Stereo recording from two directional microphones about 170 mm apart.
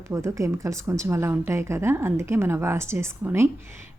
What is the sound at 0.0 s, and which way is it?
A woman's voice, 15° right (ahead or behind).